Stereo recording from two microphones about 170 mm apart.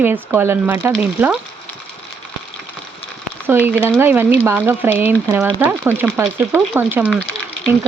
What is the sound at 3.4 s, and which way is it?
Speech, 10° right (ahead or behind).